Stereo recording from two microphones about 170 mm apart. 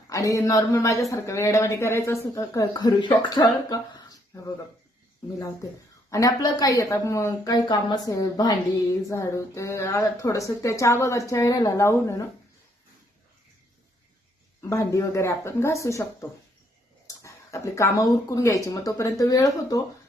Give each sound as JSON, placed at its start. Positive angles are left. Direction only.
{"t": 0.1, "sound": "speech", "side_deg": 20}
{"t": 6.1, "sound": "speech", "side_deg": 20}
{"t": 14.6, "sound": "speech", "side_deg": 15}
{"t": 17.1, "sound": "speech", "side_deg": 15}